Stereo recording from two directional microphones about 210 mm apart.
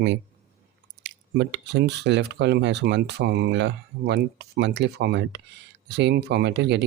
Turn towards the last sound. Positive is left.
turn(degrees=-55)  # may be behind; listen again after turning